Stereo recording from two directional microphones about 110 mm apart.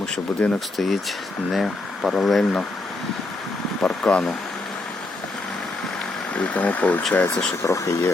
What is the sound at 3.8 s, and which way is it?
Speech, 5° left (ahead or behind).